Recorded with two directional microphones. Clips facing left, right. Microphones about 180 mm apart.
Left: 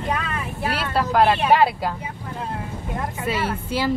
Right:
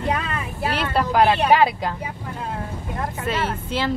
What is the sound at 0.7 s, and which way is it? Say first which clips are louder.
Speech: right 1 dB; centre (ahead or behind).